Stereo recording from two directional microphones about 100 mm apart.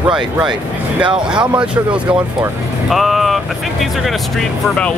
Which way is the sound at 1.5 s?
10° right (ahead or behind).